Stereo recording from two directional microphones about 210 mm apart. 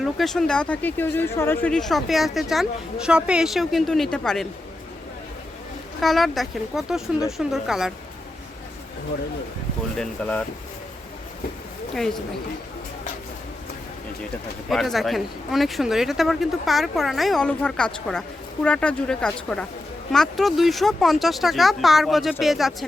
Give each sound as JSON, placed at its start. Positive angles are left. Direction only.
{"t": 0.0, "sound": "speech", "side_deg": 0}
{"t": 6.0, "sound": "speech", "side_deg": 0}
{"t": 10.0, "sound": "speech", "side_deg": 5}
{"t": 14.7, "sound": "speech", "side_deg": 0}